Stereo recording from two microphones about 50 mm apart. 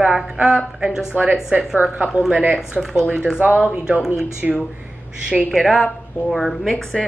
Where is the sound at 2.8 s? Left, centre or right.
Centre.